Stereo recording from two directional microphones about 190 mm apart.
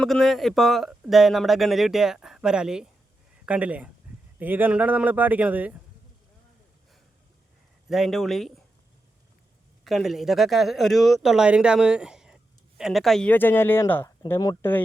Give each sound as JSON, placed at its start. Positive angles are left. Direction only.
{"t": 0.0, "sound": "a man's voice", "side_deg": 0}
{"t": 7.9, "sound": "speech", "side_deg": 0}
{"t": 9.8, "sound": "speech", "side_deg": 0}